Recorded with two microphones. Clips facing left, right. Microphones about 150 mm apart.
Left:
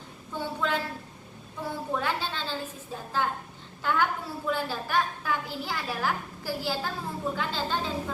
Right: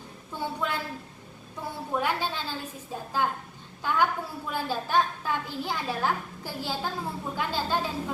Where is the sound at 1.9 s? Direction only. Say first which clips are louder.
Right 4 dB; 10° right (ahead or behind).